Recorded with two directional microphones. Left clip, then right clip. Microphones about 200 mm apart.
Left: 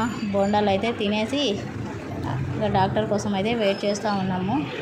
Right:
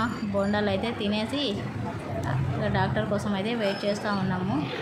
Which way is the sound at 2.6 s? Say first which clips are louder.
Left 6 dB; 15° left (ahead or behind).